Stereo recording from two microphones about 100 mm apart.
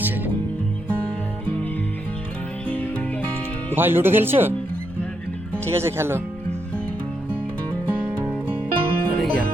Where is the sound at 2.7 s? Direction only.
15° left (ahead or behind).